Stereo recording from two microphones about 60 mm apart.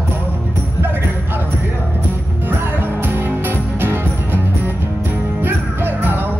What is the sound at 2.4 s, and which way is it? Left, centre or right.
Music, right.